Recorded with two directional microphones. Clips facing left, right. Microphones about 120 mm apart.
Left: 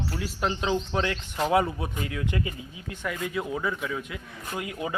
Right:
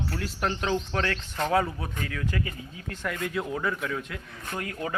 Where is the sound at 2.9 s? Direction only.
5° left (ahead or behind).